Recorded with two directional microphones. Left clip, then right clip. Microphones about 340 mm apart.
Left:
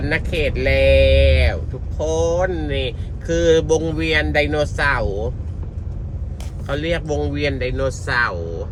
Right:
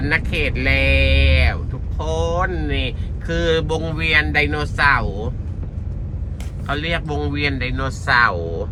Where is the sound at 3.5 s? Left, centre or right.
Right.